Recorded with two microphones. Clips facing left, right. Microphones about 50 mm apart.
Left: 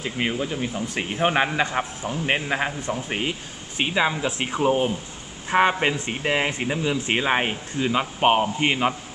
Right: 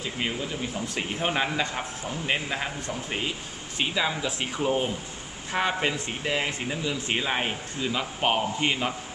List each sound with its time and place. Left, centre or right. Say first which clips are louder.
0.0 s speech: left 5 dB; left
5.5 s speech: left 7 dB; left